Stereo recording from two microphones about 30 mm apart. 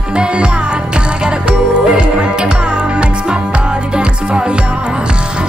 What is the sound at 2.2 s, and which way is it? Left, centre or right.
Music, right.